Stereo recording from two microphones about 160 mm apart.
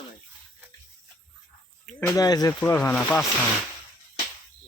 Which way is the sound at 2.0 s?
20° left (ahead or behind).